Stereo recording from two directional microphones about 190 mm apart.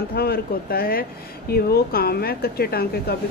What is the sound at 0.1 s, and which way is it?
A woman's voice, 55° left (ahead or behind).